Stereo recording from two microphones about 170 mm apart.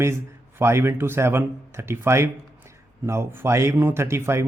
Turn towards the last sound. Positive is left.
turn(degrees=-15)  # may be behind; listen again after turning